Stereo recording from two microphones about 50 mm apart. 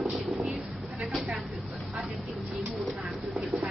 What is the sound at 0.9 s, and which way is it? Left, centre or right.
Speech, centre.